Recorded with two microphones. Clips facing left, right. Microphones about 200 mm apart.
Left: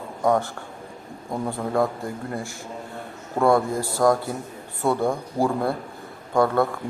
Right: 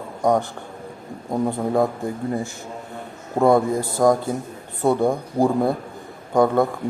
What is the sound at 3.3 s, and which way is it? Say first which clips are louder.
A man's voice: right 3 dB; 20° right (ahead or behind).